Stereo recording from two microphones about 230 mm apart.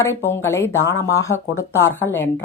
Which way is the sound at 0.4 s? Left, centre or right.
Centre.